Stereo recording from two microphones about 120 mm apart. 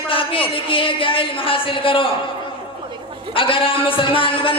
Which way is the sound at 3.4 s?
45° left (ahead or behind).